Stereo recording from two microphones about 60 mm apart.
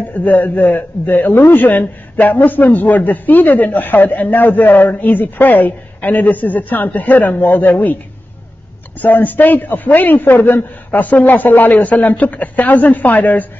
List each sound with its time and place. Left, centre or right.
0.1 s a man's voice: left
9.0 s a man's voice: left